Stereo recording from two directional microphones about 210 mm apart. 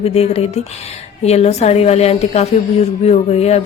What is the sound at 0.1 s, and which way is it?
A woman's voice, 30° left (ahead or behind).